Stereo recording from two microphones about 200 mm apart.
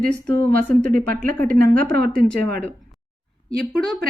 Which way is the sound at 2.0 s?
50° right (ahead or behind).